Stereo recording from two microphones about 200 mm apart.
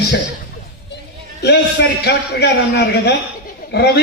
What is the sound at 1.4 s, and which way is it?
A man's voice, 55° left (ahead or behind).